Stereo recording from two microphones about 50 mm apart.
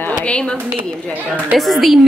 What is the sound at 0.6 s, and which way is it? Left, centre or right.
Speech, right.